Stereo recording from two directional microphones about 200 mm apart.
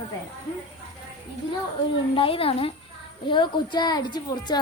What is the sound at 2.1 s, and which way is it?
A woman's voice, 25° left (ahead or behind).